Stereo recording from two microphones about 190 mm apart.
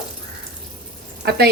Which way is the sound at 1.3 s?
55° right (ahead or behind).